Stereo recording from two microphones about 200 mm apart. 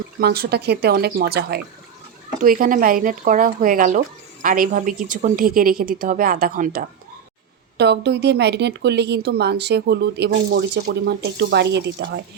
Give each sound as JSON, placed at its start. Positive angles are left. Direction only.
{"t": 0.2, "sound": "speech", "side_deg": -50}
{"t": 7.8, "sound": "speech", "side_deg": -55}